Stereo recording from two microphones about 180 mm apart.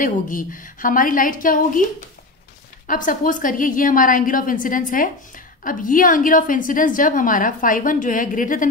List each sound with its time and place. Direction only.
0.0 s a woman's voice: 50° left (ahead or behind)
2.9 s a woman's voice: 50° left (ahead or behind)